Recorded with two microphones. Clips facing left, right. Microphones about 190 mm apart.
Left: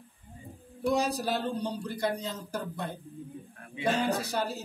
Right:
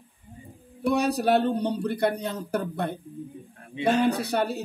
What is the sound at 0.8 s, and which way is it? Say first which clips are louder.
Speech: right 5 dB; 65° right (ahead or behind).